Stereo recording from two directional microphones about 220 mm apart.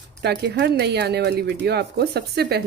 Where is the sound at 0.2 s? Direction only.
50° right (ahead or behind).